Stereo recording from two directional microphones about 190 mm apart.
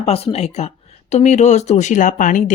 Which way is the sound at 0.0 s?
30° left (ahead or behind).